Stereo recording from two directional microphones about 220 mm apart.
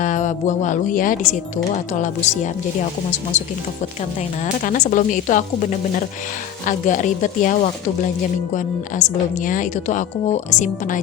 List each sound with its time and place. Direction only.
0.0 s speech: 35° left (ahead or behind)
4.6 s speech: 35° left (ahead or behind)
6.7 s speech: 35° left (ahead or behind)